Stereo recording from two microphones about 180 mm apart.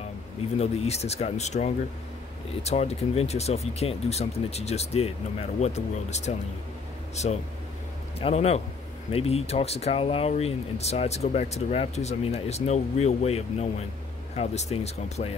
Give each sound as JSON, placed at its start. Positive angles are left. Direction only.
{"t": 0.6, "sound": "speech", "side_deg": 35}